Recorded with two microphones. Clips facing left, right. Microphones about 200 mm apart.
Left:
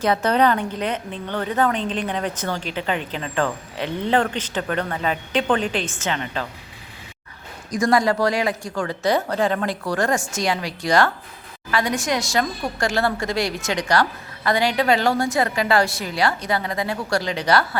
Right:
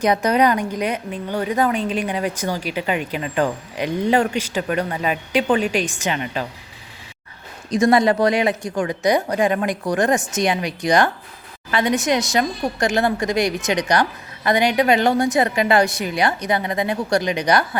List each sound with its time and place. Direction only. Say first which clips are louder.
0.0 s a woman's voice: right 2 dB; 15° right (ahead or behind)
7.7 s speech: right 3 dB; 25° right (ahead or behind)